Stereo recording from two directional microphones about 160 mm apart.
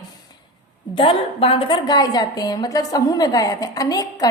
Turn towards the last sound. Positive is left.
turn(degrees=20)  # may be behind; listen again after turning